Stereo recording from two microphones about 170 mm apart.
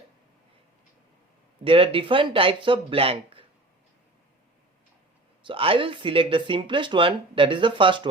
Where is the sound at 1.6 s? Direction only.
30° right (ahead or behind).